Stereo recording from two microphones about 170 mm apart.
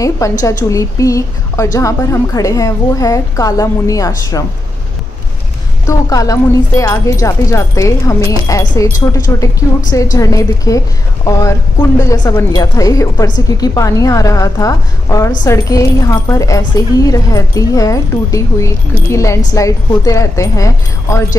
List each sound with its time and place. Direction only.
0.0 s speech: 20° left (ahead or behind)
5.9 s speech: 20° left (ahead or behind)